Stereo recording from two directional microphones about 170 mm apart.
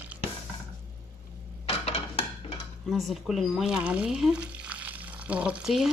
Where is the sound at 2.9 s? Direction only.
Centre (ahead or behind).